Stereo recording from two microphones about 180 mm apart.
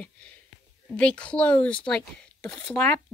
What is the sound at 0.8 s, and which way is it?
Speech, 5° left (ahead or behind).